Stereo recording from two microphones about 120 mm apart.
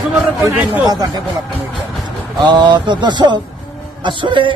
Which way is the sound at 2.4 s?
40° right (ahead or behind).